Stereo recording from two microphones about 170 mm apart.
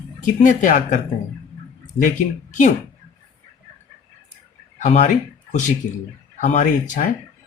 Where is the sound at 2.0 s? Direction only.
50° left (ahead or behind).